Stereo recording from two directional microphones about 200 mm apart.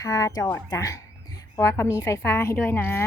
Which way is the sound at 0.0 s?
15° left (ahead or behind).